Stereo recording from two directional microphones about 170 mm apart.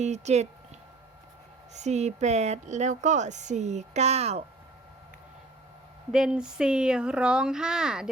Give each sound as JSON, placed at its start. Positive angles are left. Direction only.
{"t": 0.0, "sound": "speech", "side_deg": -40}
{"t": 1.7, "sound": "speech", "side_deg": -40}
{"t": 6.1, "sound": "speech", "side_deg": -5}